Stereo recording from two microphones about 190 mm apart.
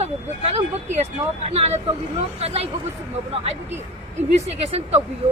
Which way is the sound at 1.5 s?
35° right (ahead or behind).